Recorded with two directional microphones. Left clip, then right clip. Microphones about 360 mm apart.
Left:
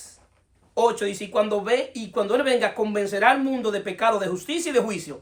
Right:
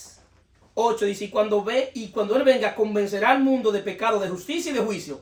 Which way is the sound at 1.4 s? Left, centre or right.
Centre.